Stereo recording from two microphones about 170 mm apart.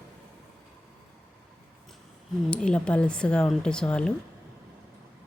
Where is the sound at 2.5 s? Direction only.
5° left (ahead or behind).